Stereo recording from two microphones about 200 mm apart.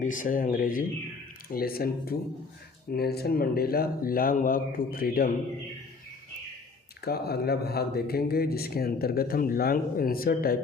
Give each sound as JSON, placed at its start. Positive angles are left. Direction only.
{"t": 0.0, "sound": "speech", "side_deg": 40}
{"t": 7.0, "sound": "speech", "side_deg": 50}